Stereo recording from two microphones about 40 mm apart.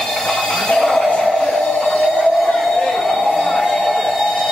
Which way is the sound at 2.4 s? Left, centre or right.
Centre.